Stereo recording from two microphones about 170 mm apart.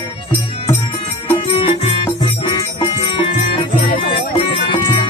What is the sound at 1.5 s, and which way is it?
Music, 30° left (ahead or behind).